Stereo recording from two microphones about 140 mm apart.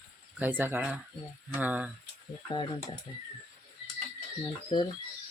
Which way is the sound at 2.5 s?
30° left (ahead or behind).